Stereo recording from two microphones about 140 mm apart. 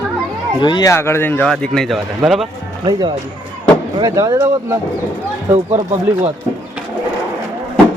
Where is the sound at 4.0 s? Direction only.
30° right (ahead or behind).